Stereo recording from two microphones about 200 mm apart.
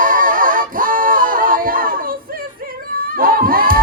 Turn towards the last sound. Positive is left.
turn(degrees=-45)  # may be behind; listen again after turning